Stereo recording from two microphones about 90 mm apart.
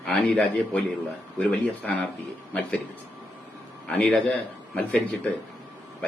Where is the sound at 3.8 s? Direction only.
10° left (ahead or behind).